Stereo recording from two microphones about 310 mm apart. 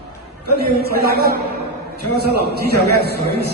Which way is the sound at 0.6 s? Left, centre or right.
Right.